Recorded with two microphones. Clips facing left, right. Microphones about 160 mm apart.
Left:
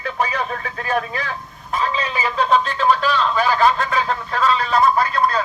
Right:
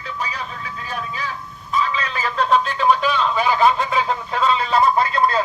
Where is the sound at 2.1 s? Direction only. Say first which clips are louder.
Left 1 dB; 5° left (ahead or behind); by 5.4 s 25° right (ahead or behind).